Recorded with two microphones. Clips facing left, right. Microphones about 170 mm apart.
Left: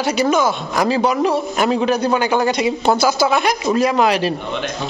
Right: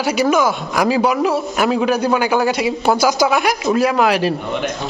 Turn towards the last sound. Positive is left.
turn(degrees=-10)  # may be behind; listen again after turning